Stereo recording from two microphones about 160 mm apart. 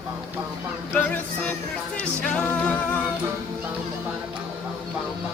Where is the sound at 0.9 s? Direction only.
10° left (ahead or behind).